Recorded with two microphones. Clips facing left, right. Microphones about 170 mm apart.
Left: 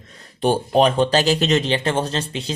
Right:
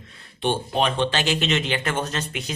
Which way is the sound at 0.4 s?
40° left (ahead or behind).